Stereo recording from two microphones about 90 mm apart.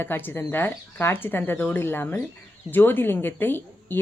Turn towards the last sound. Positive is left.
turn(degrees=25)  # may be behind; listen again after turning